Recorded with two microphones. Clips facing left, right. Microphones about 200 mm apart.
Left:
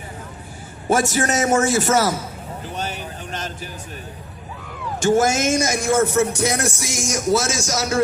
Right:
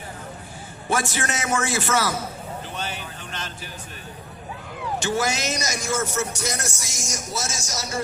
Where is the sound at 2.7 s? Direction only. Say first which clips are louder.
Left 4 dB; 40° left (ahead or behind).